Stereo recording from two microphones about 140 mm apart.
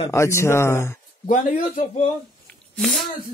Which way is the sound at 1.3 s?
60° left (ahead or behind).